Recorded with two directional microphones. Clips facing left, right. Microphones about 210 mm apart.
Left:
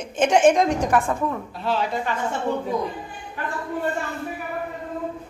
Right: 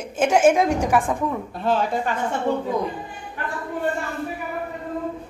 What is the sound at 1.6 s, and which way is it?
Speech, 50° right (ahead or behind).